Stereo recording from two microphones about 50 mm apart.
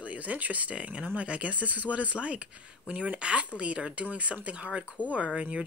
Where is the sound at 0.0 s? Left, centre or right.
Right.